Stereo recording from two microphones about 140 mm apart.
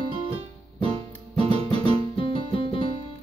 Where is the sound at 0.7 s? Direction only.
40° right (ahead or behind).